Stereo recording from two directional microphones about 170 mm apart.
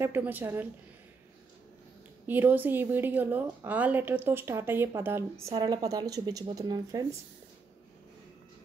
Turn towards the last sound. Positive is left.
turn(degrees=-20)  # may be behind; listen again after turning